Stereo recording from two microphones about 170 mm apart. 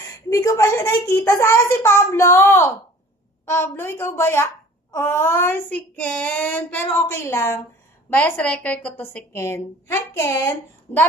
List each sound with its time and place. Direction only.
0.0 s a child's voice: 20° left (ahead or behind)